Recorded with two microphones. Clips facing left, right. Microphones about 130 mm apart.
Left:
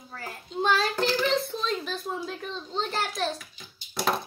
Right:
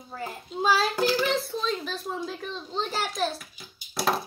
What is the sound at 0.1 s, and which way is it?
Speech, 20° right (ahead or behind).